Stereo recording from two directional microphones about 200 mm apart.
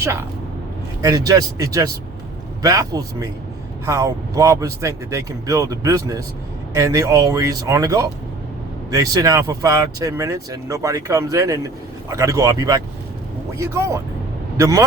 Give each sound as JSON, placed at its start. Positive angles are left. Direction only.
{"t": 0.0, "sound": "speech", "side_deg": -15}